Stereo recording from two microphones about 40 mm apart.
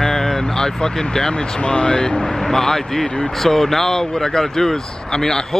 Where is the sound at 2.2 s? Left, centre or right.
Centre.